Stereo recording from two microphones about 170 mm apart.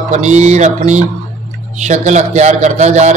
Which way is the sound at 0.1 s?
40° right (ahead or behind).